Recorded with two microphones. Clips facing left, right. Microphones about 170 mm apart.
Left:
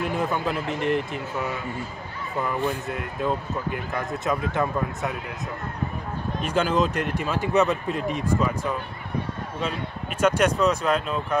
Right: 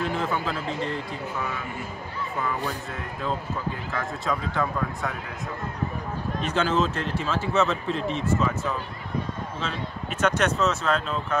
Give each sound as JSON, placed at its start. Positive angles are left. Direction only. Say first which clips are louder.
{"t": 0.0, "sound": "speech", "louder": "left 2 dB", "side_deg": 15}
{"t": 3.9, "sound": "speech", "louder": "left 2 dB", "side_deg": 20}
{"t": 6.4, "sound": "speech", "louder": "left 2 dB", "side_deg": 10}
{"t": 10.2, "sound": "speech", "louder": "left 3 dB", "side_deg": 10}